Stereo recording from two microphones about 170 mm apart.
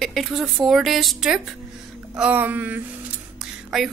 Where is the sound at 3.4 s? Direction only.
Centre (ahead or behind).